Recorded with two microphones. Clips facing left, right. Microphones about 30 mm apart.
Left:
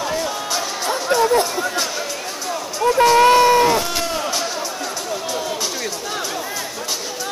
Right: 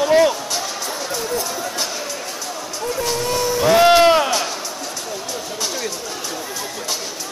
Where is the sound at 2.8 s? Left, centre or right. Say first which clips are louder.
Left 9 dB; left.